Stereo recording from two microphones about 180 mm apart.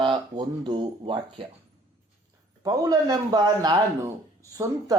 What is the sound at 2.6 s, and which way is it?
Speech, 20° right (ahead or behind).